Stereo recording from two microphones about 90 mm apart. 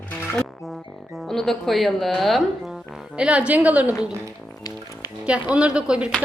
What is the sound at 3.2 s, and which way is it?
Speech, 15° right (ahead or behind).